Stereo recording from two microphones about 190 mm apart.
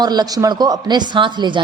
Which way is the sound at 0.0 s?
20° right (ahead or behind).